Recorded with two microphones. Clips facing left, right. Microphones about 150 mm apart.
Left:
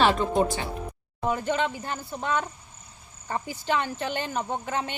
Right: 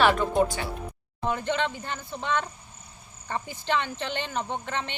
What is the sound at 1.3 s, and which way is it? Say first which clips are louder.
Speech: left 1 dB; 5° left (ahead or behind).